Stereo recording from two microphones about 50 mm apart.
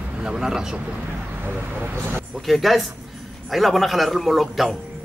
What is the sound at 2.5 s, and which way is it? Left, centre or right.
A man's voice, centre.